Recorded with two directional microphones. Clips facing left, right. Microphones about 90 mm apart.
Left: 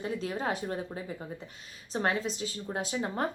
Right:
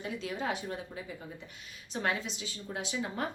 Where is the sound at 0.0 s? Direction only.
40° left (ahead or behind).